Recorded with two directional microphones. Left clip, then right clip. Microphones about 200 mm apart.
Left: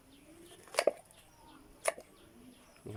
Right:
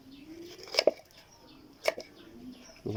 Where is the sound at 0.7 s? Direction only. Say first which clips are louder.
Right 5 dB; 10° right (ahead or behind).